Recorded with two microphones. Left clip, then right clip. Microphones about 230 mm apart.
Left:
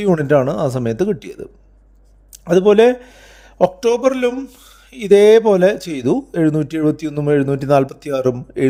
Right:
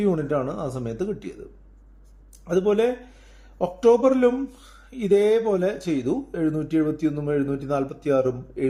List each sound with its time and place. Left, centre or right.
0.0 s a man's voice: left
2.4 s a man's voice: left